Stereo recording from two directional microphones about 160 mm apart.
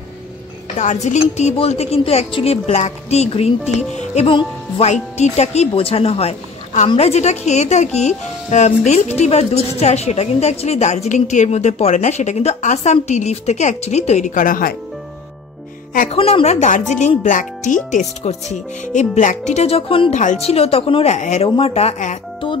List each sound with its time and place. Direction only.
0.7 s a woman's voice: 45° left (ahead or behind); by 14.8 s 60° left (ahead or behind)
16.1 s a woman's voice: 35° left (ahead or behind); by 17.7 s 55° left (ahead or behind)
17.9 s a woman's voice: 45° left (ahead or behind)